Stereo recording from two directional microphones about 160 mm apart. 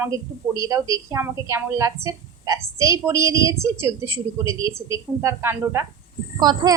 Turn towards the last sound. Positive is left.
turn(degrees=-25)  # may be behind; listen again after turning